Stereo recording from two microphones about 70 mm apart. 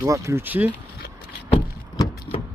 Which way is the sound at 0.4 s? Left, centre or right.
Right.